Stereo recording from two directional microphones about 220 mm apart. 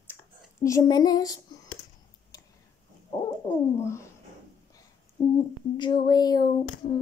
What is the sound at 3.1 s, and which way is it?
Owl, 10° left (ahead or behind).